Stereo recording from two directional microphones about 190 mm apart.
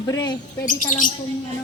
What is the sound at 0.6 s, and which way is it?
Speech, 45° left (ahead or behind).